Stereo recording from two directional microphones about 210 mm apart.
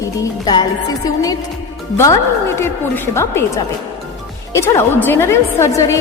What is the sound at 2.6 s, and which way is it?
A woman's voice, 10° left (ahead or behind).